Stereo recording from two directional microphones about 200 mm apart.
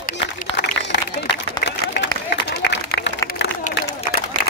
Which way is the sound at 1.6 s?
60° left (ahead or behind).